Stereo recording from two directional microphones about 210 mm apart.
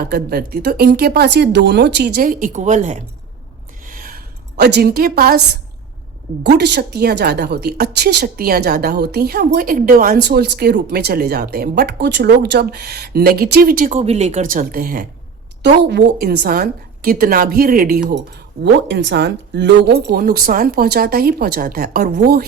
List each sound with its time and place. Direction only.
0.0 s a woman's voice: 45° right (ahead or behind)
3.8 s a sound: 40° right (ahead or behind)
6.4 s a woman's voice: 50° right (ahead or behind)
18.6 s a woman's voice: 55° right (ahead or behind)